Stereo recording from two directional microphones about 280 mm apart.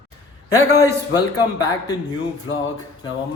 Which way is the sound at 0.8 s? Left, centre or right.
Centre.